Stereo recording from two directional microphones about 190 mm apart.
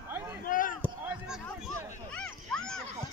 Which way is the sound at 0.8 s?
5° right (ahead or behind).